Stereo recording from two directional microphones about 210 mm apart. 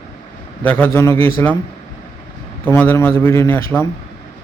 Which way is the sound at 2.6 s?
10° left (ahead or behind).